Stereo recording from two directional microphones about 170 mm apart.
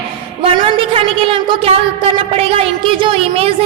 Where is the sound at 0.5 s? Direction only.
30° right (ahead or behind).